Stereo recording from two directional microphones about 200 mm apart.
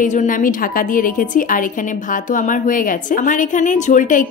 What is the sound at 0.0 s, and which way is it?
A woman's voice, 40° left (ahead or behind).